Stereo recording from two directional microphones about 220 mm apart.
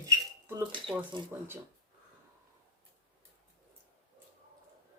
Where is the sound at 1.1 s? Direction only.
20° right (ahead or behind).